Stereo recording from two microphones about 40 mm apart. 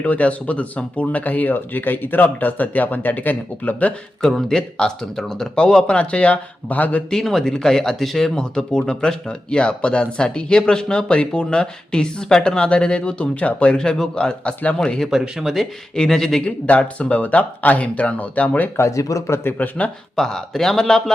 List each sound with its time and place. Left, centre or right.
0.0 s speech: left
4.2 s speech: centre; by 7.0 s left
7.1 s speech: centre
8.4 s speech: centre
13.7 s speech: centre
15.1 s speech: centre
16.0 s speech: centre
16.6 s speech: left
19.5 s speech: left
20.1 s speech: centre